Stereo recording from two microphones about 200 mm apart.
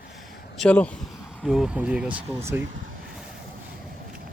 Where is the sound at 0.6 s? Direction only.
5° left (ahead or behind); by 2.6 s 10° right (ahead or behind).